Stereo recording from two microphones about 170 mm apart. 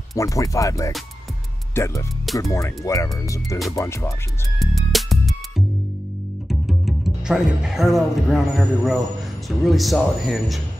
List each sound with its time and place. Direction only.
0.1 s speech: 20° left (ahead or behind)
4.6 s music: centre (ahead or behind)
6.5 s a man's voice: centre (ahead or behind)